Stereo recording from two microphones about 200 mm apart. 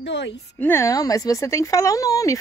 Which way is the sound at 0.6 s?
10° left (ahead or behind).